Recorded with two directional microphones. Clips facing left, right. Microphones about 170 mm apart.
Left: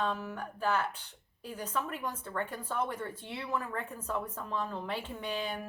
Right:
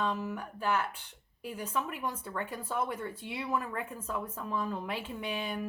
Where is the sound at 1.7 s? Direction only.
10° right (ahead or behind).